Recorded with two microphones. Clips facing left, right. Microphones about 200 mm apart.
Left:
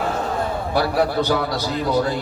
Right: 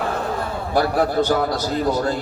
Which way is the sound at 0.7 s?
45° right (ahead or behind).